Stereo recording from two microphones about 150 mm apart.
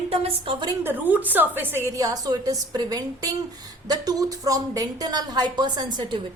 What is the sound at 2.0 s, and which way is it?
A woman's voice, 25° right (ahead or behind).